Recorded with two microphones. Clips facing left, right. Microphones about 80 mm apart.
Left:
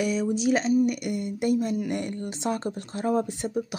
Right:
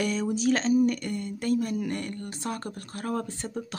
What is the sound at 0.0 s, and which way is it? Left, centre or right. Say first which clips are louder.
Speech: left 2 dB; centre.